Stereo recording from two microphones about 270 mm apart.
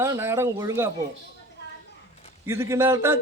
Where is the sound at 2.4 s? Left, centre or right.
Centre.